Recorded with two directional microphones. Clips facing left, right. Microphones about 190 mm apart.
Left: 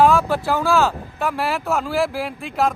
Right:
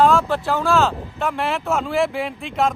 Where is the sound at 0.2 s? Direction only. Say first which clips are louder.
Left 1 dB; 10° left (ahead or behind).